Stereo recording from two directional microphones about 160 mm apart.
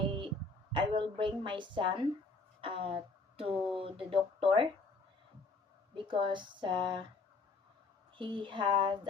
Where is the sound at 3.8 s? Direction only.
35° right (ahead or behind).